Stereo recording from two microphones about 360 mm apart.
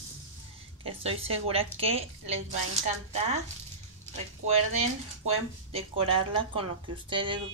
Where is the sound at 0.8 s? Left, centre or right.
Centre.